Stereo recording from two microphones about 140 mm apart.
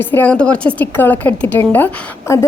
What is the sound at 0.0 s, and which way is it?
A woman's voice, 15° left (ahead or behind).